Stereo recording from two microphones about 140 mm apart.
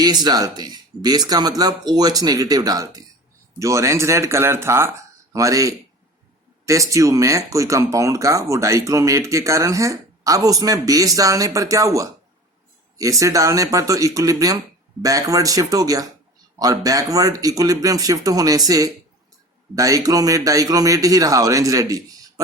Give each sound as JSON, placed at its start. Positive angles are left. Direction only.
{"t": 0.0, "sound": "speech", "side_deg": -30}